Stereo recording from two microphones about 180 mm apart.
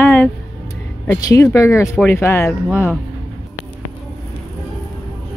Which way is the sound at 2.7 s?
5° right (ahead or behind).